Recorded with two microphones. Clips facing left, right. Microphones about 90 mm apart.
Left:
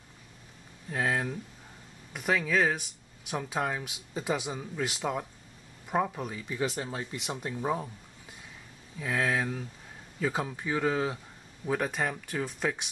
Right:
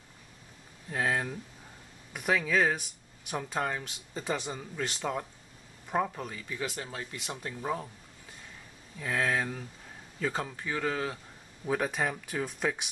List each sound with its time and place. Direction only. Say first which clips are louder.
0.8 s speech: left 1 dB; centre (ahead or behind)
6.6 s speech: left 5 dB; 20° left (ahead or behind)
11.6 s speech: even; centre (ahead or behind)